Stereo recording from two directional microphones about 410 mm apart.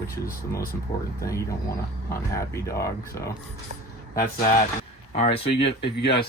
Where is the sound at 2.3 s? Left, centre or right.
Centre.